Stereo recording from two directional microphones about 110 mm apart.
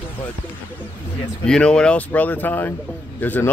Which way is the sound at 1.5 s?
10° left (ahead or behind).